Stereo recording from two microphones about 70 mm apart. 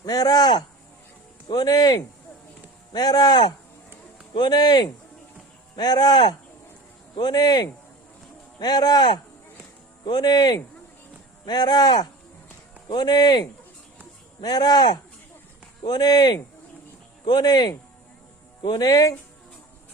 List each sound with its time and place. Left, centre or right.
0.0 s speech: left
4.4 s speech: left
10.1 s speech: left